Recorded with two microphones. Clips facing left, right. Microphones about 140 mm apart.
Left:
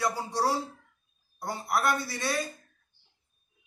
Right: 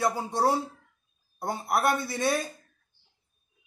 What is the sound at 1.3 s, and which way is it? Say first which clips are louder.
A man's voice: right 2 dB; 25° right (ahead or behind).